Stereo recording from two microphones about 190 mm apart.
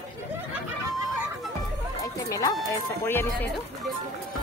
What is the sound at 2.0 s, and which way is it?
Speech, 20° left (ahead or behind).